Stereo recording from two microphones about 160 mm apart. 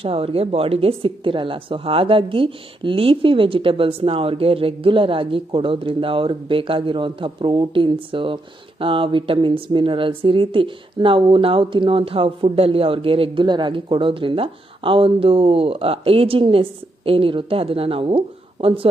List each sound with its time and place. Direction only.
0.0 s a woman's voice: 35° right (ahead or behind)